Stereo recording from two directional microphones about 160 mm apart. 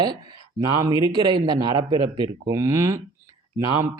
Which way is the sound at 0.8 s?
25° right (ahead or behind).